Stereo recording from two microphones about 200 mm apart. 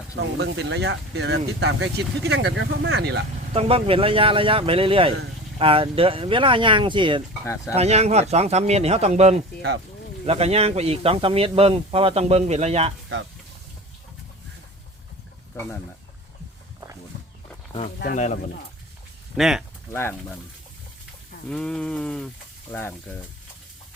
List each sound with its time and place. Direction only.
0.3 s speech: 60° right (ahead or behind)
3.5 s speech: 30° right (ahead or behind)
9.6 s speech: 65° right (ahead or behind)
10.2 s speech: 30° right (ahead or behind)
17.7 s wild animals: 30° left (ahead or behind)
18.0 s speech: 40° left (ahead or behind)
19.4 s a sound: 5° right (ahead or behind)
19.9 s speech: 10° left (ahead or behind)
21.5 s a sound: 5° left (ahead or behind)
22.7 s speech: 10° left (ahead or behind)